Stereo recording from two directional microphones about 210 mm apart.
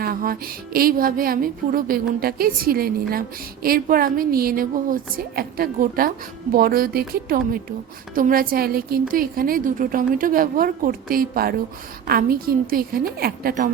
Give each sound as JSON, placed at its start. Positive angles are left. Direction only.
{"t": 0.0, "sound": "speech", "side_deg": -45}